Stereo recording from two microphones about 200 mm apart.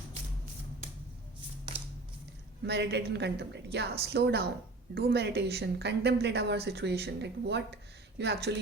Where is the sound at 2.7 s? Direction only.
55° right (ahead or behind).